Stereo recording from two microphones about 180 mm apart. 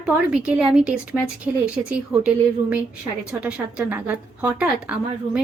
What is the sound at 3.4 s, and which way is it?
A woman's voice, 5° right (ahead or behind).